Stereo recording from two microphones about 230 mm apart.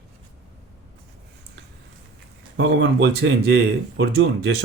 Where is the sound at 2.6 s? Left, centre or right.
Right.